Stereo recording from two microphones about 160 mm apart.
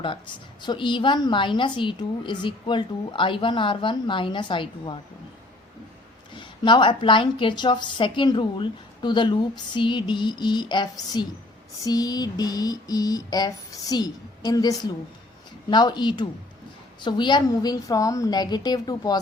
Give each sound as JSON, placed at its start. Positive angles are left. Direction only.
{"t": 0.6, "sound": "a woman's voice", "side_deg": 30}
{"t": 6.3, "sound": "a woman's voice", "side_deg": 30}